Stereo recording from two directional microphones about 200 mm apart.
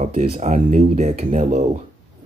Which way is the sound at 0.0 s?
35° right (ahead or behind).